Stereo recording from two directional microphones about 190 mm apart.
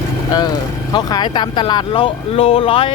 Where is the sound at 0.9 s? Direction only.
20° left (ahead or behind).